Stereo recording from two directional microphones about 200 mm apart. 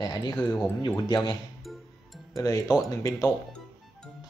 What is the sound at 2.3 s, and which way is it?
Speech, 15° left (ahead or behind).